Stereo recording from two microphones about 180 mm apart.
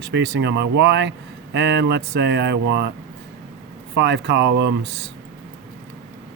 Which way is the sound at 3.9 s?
70° right (ahead or behind).